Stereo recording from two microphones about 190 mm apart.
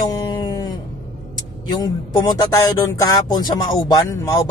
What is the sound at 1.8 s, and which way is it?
Speech, 20° left (ahead or behind).